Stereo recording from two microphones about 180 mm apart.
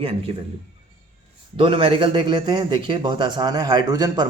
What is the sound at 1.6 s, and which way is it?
Speech, 30° right (ahead or behind).